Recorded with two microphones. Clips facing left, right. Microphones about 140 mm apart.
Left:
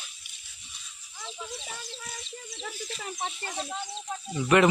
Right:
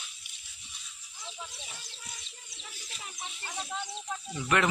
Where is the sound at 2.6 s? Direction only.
80° left.